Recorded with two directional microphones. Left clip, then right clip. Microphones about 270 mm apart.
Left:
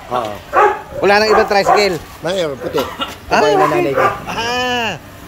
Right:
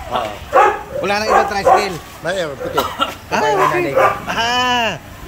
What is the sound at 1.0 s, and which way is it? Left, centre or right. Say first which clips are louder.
Speech: left 4 dB; centre.